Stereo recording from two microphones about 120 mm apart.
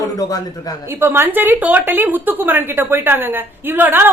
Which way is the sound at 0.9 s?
20° right (ahead or behind).